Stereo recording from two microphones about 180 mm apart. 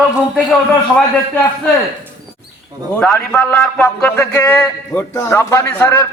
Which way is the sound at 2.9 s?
10° left (ahead or behind).